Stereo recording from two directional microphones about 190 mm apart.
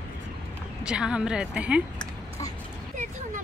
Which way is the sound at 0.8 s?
5° right (ahead or behind).